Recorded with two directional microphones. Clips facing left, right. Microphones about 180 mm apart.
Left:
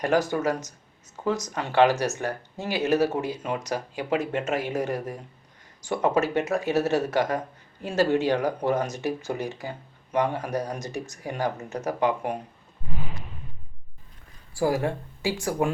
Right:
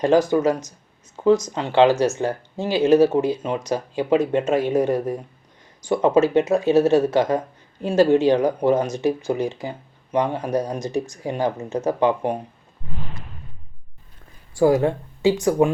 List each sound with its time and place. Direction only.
0.1 s speech: 20° right (ahead or behind)
1.6 s speech: 20° right (ahead or behind)
1.9 s speech: 90° right
2.8 s speech: 20° right (ahead or behind)
13.0 s a sound: 5° left (ahead or behind)
14.5 s speech: 20° right (ahead or behind)